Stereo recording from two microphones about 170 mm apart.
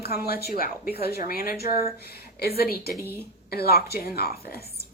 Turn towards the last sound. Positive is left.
turn(degrees=65)  # may be behind; listen again after turning